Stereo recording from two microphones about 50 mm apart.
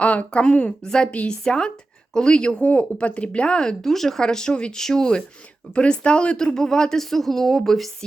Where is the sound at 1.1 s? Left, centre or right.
Left.